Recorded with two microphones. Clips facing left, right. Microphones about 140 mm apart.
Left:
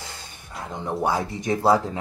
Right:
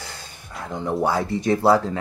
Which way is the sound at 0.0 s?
20° left (ahead or behind).